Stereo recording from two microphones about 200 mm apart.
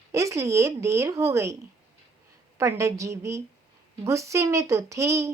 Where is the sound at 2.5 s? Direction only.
15° right (ahead or behind).